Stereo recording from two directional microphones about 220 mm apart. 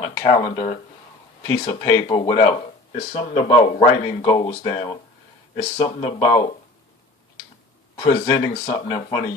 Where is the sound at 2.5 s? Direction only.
30° left (ahead or behind).